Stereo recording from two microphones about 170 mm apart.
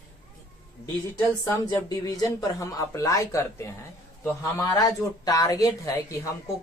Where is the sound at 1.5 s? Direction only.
20° left (ahead or behind).